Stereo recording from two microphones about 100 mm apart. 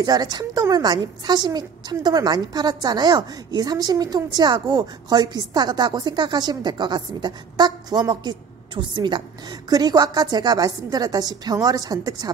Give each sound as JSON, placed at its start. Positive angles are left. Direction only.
{"t": 0.0, "sound": "a woman's voice", "side_deg": -40}